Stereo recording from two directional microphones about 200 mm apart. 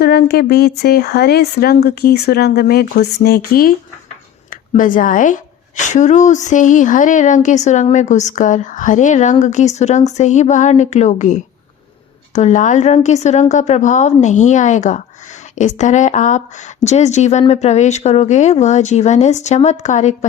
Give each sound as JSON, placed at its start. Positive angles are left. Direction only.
{"t": 0.0, "sound": "a woman's voice", "side_deg": 50}